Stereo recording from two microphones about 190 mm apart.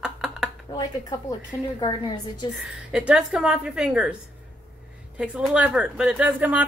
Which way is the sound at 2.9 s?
5° right (ahead or behind).